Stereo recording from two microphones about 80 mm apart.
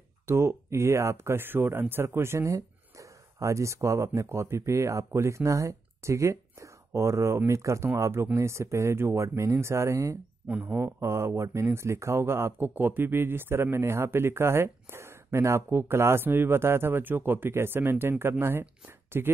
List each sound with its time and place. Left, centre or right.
0.3 s speech: right
10.5 s speech: right